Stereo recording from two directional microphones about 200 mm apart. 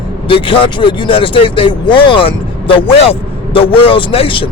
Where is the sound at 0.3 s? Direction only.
25° left (ahead or behind).